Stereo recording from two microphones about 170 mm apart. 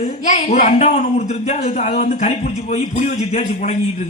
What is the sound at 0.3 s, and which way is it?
Speech, 45° left (ahead or behind).